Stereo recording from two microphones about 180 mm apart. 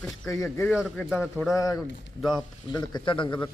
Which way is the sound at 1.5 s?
20° left (ahead or behind).